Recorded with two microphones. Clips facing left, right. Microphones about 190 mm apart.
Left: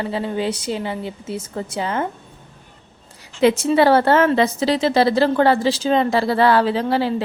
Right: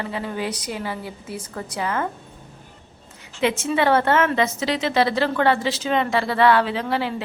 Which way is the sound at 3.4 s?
35° left (ahead or behind).